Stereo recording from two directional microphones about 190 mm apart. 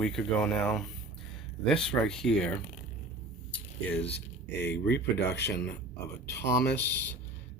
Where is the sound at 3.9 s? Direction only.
65° left (ahead or behind).